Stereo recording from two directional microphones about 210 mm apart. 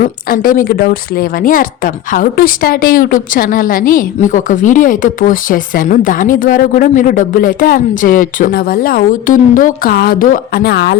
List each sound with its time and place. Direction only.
0.3 s speech: 40° left (ahead or behind)